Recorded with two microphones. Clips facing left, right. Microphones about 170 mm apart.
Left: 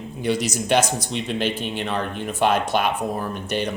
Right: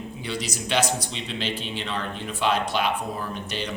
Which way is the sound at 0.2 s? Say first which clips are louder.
Left 10 dB; 50° left (ahead or behind).